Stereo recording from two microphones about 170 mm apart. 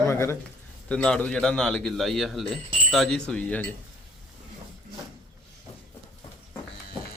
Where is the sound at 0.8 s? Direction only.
5° left (ahead or behind).